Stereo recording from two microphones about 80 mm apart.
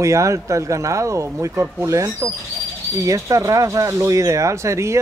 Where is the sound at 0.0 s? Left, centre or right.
Right.